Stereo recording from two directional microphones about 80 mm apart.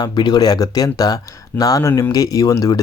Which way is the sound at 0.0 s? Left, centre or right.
Left.